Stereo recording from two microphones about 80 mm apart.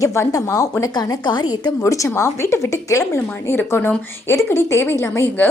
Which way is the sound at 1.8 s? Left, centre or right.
Left.